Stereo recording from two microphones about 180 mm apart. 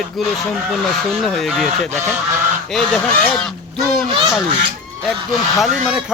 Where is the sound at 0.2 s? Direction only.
Centre (ahead or behind).